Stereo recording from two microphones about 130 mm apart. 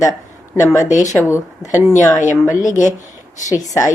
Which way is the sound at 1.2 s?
20° left (ahead or behind).